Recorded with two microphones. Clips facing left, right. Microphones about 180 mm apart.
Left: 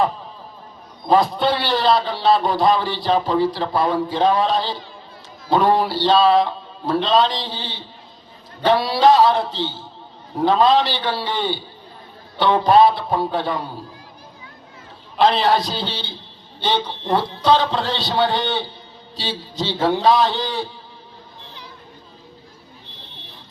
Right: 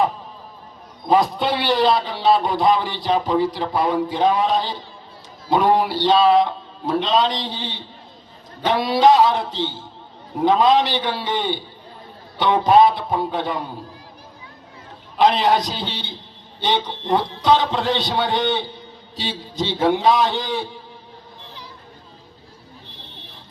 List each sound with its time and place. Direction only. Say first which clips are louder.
1.1 s a man's voice: left 1 dB; 20° right (ahead or behind)
15.2 s a man's voice: even; 15° right (ahead or behind)